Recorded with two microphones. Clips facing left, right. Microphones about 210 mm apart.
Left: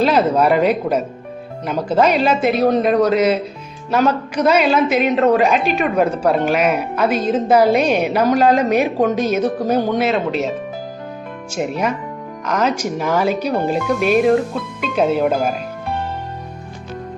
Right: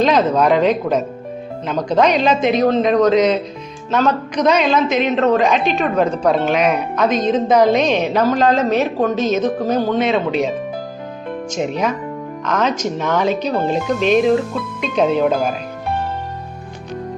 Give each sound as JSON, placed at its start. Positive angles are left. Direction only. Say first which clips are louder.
{"t": 0.0, "sound": "a man's voice", "louder": "even", "side_deg": 10}
{"t": 11.5, "sound": "a man's voice", "louder": "even", "side_deg": 5}